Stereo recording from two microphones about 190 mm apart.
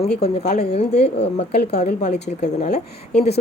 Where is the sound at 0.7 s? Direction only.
35° left (ahead or behind).